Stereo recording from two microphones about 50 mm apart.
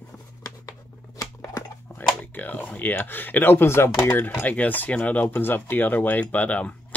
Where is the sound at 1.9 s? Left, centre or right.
Left.